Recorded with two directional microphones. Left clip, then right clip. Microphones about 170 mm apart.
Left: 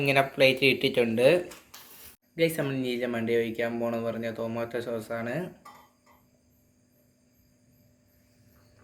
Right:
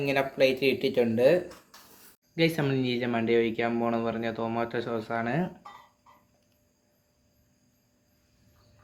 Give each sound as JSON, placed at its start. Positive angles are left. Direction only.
{"t": 0.0, "sound": "speech", "side_deg": -5}
{"t": 2.3, "sound": "speech", "side_deg": -50}